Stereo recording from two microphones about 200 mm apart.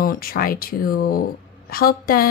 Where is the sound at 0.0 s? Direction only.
45° left (ahead or behind).